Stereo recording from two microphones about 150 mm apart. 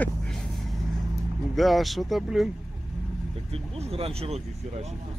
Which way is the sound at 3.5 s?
40° right (ahead or behind).